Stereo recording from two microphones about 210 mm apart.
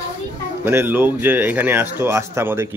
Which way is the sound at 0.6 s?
10° right (ahead or behind).